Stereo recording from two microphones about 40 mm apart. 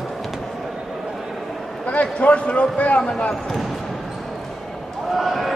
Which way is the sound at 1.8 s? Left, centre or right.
Left.